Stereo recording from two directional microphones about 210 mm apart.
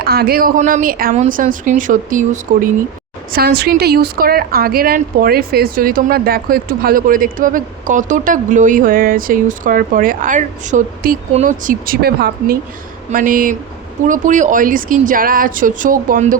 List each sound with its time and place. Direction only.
0.0 s a woman's voice: 50° right (ahead or behind)